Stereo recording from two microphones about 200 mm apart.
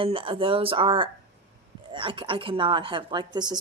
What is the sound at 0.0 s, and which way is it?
Speech, 25° right (ahead or behind).